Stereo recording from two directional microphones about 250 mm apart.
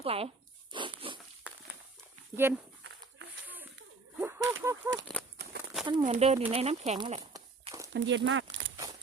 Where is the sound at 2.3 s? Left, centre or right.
Centre.